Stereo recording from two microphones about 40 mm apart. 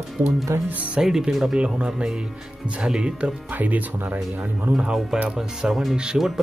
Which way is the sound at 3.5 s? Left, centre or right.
Right.